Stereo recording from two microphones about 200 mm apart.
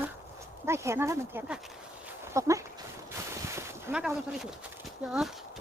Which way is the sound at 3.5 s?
15° right (ahead or behind).